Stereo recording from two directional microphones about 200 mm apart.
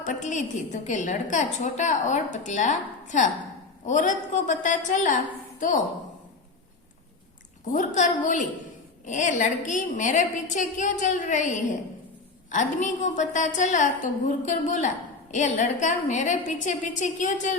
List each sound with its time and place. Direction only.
0.0 s a woman's voice: 35° left (ahead or behind)
7.7 s a woman's voice: 40° left (ahead or behind)